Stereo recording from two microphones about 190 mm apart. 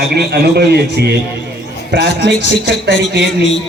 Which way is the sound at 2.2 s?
65° right (ahead or behind).